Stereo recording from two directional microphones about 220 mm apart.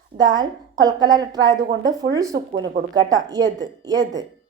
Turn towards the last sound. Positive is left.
turn(degrees=-15)  # may be behind; listen again after turning